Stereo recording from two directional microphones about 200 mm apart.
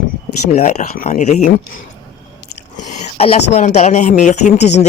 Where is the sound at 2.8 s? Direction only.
35° left (ahead or behind).